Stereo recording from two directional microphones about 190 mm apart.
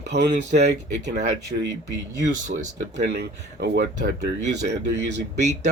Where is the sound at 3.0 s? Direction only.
60° right (ahead or behind).